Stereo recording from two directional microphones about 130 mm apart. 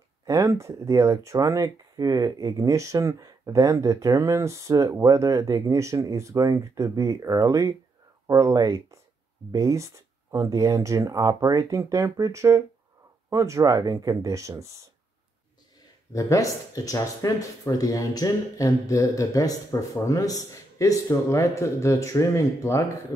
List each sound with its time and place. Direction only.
0.3 s speech: 25° right (ahead or behind)
16.1 s speech: 25° left (ahead or behind)